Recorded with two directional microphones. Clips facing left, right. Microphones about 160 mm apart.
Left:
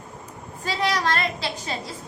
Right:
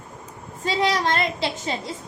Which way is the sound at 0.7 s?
25° right (ahead or behind).